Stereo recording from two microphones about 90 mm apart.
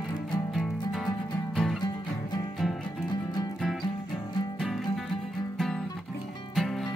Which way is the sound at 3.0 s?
50° left (ahead or behind).